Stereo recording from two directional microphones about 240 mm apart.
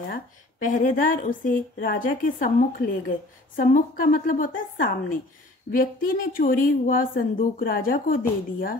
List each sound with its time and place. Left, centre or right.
0.1 s a woman's voice: left